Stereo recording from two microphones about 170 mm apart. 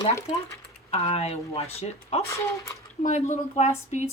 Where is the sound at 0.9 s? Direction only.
35° left (ahead or behind).